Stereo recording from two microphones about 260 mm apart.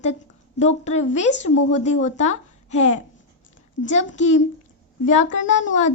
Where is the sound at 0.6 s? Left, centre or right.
Left.